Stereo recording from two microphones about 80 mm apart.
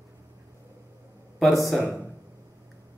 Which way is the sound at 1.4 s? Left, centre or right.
Centre.